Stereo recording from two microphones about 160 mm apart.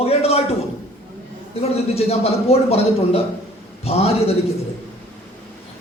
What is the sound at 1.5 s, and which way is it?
Speech, 40° left (ahead or behind).